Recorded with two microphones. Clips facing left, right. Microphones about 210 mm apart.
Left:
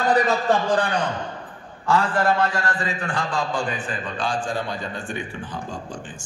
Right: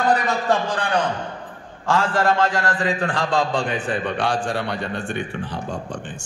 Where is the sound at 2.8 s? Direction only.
75° right (ahead or behind).